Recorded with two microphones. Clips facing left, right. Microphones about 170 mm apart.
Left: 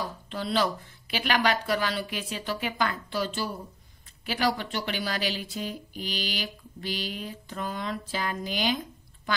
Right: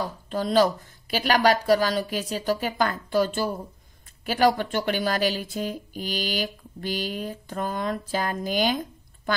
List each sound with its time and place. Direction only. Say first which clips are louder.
0.3 s speech: right 7 dB; 45° right (ahead or behind)